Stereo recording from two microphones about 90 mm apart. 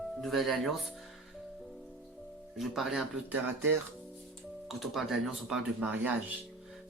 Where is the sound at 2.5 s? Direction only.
5° right (ahead or behind).